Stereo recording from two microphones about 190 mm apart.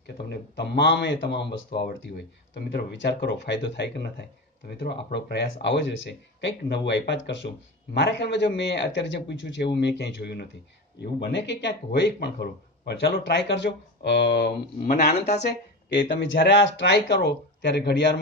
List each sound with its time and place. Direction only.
0.0 s speech: 60° left (ahead or behind)